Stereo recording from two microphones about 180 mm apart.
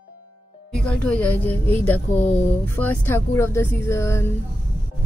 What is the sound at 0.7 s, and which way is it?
Speech, 5° left (ahead or behind).